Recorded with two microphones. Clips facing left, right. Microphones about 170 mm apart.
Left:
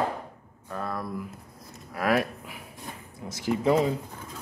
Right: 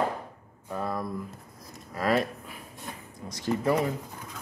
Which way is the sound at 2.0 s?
10° left (ahead or behind).